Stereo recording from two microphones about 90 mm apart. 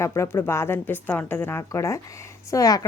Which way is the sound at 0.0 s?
30° left (ahead or behind).